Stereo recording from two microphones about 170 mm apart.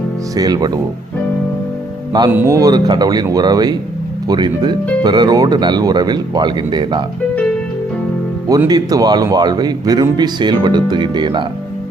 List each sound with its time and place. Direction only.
0.3 s speech: 25° right (ahead or behind)
2.3 s speech: 15° right (ahead or behind)
8.4 s speech: 25° right (ahead or behind)